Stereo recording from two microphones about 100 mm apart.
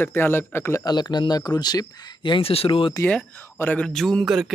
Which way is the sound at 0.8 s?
45° left (ahead or behind).